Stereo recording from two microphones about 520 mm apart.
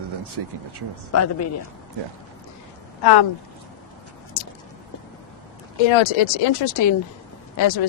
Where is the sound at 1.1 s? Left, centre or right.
Left.